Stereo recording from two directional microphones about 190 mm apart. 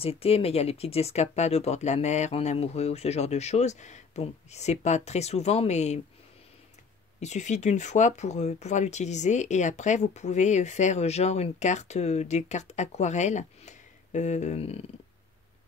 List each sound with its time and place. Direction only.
0.0 s speech: 30° left (ahead or behind)
7.2 s speech: 35° left (ahead or behind)